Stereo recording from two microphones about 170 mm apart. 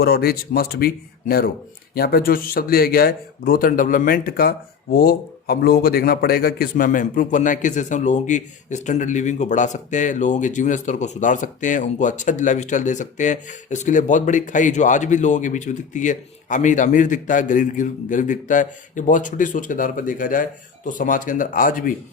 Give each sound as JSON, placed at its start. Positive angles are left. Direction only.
{"t": 0.0, "sound": "speech", "side_deg": 65}
{"t": 2.0, "sound": "speech", "side_deg": 65}